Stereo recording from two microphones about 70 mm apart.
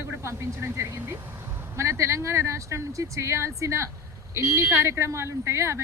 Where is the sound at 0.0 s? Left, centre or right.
Right.